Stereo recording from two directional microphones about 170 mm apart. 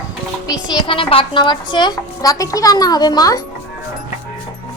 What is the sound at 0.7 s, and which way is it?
A child's voice, 30° left (ahead or behind).